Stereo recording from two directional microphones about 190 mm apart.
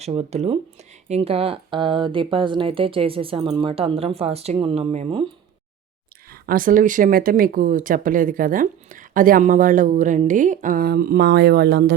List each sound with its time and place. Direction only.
0.0 s speech: 30° right (ahead or behind)
6.3 s speech: 50° right (ahead or behind)